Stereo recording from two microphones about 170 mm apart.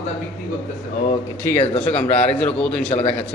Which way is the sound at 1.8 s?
10° left (ahead or behind).